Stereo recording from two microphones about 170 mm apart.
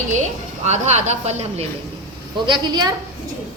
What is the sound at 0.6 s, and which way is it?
A woman's voice, 40° right (ahead or behind).